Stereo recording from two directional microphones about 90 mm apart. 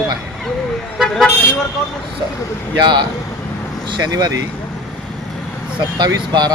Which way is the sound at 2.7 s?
55° right (ahead or behind).